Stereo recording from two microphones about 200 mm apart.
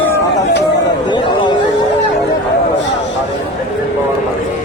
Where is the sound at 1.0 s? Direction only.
25° left (ahead or behind).